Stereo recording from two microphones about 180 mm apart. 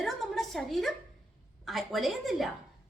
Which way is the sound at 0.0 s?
Centre (ahead or behind).